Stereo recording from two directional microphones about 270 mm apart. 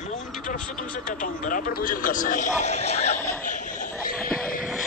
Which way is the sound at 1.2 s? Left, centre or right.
Left.